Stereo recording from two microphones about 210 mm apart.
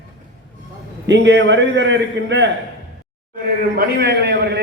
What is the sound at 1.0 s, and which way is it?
A man's voice, 55° right (ahead or behind).